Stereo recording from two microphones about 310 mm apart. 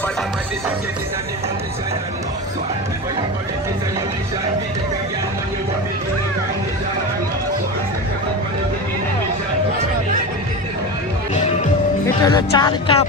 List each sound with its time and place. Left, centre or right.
12.0 s speech: centre